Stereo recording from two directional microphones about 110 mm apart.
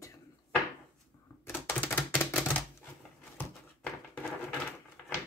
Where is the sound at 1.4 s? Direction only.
20° left (ahead or behind).